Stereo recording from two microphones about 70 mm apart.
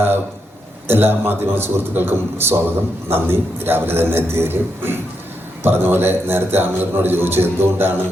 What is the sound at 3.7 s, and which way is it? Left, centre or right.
A man's voice, right.